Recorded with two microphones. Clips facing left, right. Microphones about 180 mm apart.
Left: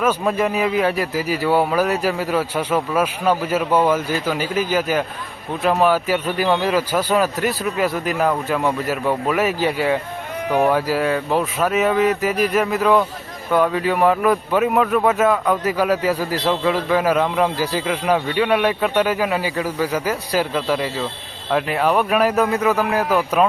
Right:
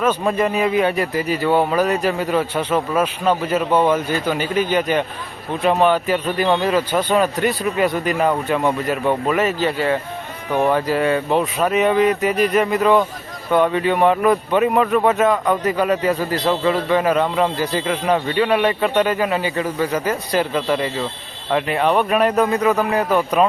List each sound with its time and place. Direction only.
0.0 s a man's voice: 5° left (ahead or behind)